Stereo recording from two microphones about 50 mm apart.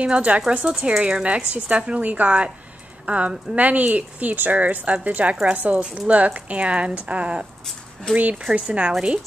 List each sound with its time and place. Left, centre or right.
0.0 s speech: right